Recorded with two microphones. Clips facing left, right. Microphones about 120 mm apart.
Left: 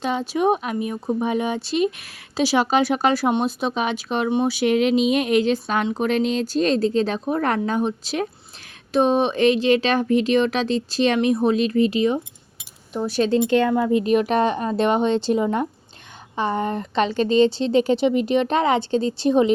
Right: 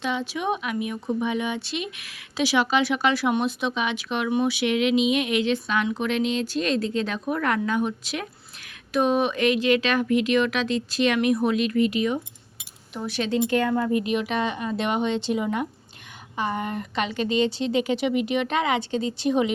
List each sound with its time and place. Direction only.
0.0 s speech: 40° left (ahead or behind); by 14.0 s 20° left (ahead or behind)
14.0 s speech: 40° left (ahead or behind)